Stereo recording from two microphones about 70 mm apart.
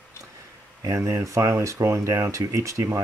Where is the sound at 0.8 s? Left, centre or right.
Right.